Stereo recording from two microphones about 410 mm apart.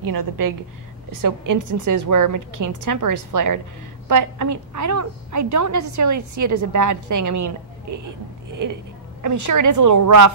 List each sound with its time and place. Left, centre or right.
0.0 s a woman's voice: right